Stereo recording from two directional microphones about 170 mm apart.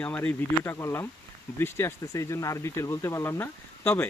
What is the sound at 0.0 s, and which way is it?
Speech, 10° left (ahead or behind).